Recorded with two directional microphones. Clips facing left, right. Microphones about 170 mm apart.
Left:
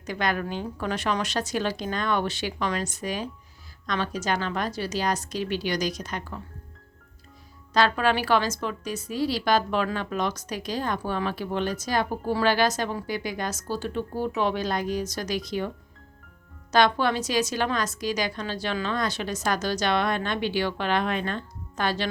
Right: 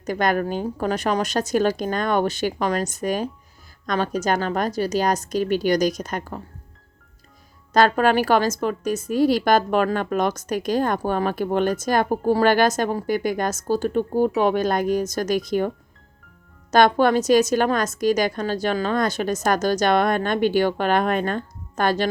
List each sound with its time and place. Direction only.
0.0 s a woman's voice: 45° right (ahead or behind)
7.7 s a woman's voice: 45° right (ahead or behind)
16.7 s a woman's voice: 50° right (ahead or behind)